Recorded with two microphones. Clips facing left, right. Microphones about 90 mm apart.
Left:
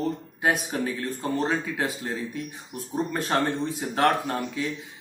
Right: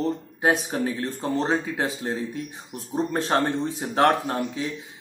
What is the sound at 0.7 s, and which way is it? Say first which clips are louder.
Speech: right 2 dB; 30° right (ahead or behind).